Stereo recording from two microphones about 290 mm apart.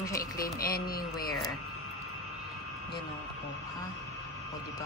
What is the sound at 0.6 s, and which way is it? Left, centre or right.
Speech, left.